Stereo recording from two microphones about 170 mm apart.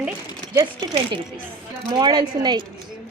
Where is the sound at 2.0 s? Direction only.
25° right (ahead or behind).